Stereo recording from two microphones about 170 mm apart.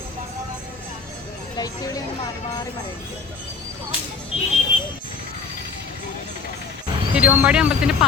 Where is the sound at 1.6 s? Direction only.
20° left (ahead or behind).